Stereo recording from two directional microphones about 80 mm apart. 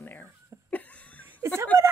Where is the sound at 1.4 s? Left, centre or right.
Right.